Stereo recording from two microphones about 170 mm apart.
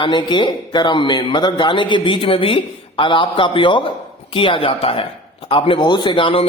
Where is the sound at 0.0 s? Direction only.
25° left (ahead or behind).